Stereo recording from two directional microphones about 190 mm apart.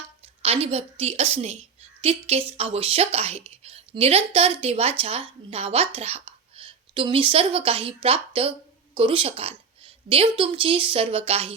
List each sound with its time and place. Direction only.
0.4 s a woman's voice: 30° right (ahead or behind)